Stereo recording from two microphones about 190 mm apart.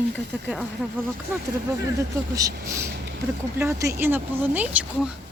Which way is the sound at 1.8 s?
15° right (ahead or behind).